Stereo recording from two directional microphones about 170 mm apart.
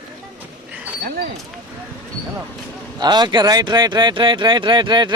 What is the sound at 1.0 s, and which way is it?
Speech, 65° right (ahead or behind).